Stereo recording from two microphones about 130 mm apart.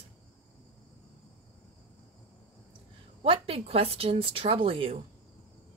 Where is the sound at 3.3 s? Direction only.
50° right (ahead or behind).